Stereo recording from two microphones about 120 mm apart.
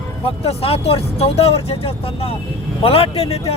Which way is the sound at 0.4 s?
55° left (ahead or behind).